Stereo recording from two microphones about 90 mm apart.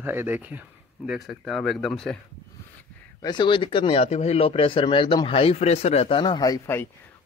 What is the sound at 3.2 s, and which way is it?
Speech, 60° left (ahead or behind).